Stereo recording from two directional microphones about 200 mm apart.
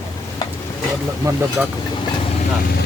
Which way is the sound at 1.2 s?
20° right (ahead or behind).